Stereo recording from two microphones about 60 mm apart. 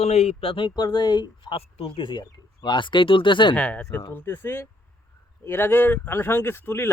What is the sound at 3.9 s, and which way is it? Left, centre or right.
Speech, left.